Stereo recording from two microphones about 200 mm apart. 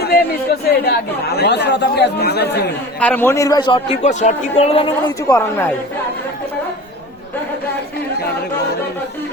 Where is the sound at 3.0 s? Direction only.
10° left (ahead or behind); by 5.3 s 25° left (ahead or behind).